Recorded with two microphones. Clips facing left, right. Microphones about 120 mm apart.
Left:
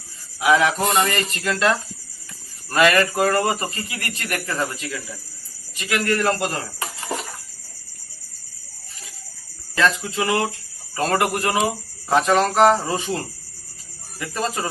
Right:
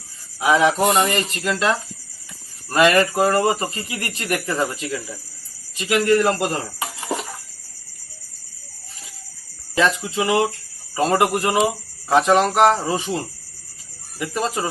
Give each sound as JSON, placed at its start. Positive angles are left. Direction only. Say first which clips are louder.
{"t": 0.3, "sound": "speech", "louder": "right 1 dB", "side_deg": -25}
{"t": 9.7, "sound": "speech", "louder": "right 1 dB", "side_deg": -15}